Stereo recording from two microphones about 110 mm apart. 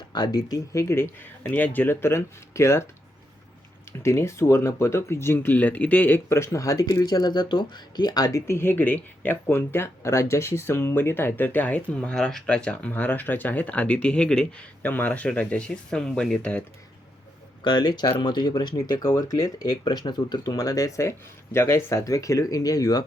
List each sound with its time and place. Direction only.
0.1 s speech: 40° left (ahead or behind)
4.0 s speech: 25° left (ahead or behind)
17.6 s speech: 45° left (ahead or behind)